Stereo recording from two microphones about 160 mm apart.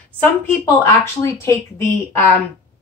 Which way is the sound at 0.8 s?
15° left (ahead or behind).